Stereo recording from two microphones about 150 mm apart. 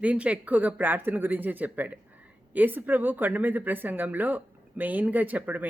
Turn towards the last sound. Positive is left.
turn(degrees=-10)  # may be behind; listen again after turning